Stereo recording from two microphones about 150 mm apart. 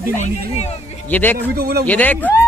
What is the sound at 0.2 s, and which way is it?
Speech, 45° left (ahead or behind).